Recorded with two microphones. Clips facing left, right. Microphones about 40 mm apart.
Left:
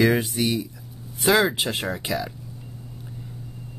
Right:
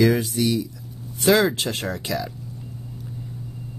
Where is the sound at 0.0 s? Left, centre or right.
Left.